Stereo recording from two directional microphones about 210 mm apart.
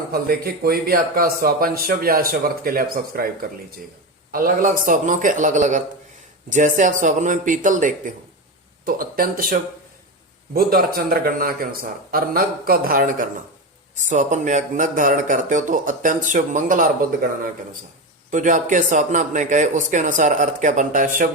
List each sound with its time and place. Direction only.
0.1 s speech: 45° right (ahead or behind)